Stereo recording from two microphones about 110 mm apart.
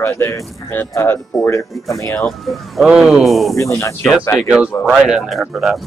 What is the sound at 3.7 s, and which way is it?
Speech, 25° left (ahead or behind).